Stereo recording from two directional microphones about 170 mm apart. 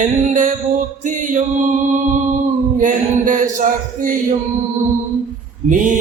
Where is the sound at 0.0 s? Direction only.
50° right (ahead or behind).